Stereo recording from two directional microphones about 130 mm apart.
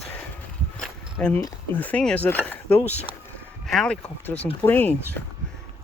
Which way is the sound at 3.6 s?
5° left (ahead or behind).